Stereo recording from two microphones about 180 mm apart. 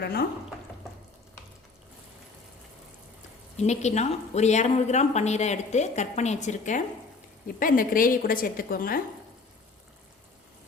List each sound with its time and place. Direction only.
0.0 s speech: 60° left (ahead or behind)
3.6 s a woman's voice: 40° left (ahead or behind)